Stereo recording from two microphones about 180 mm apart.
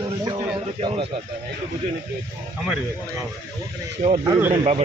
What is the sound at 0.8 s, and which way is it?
Speech, 30° right (ahead or behind).